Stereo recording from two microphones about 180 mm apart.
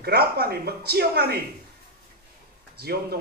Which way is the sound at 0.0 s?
60° right (ahead or behind).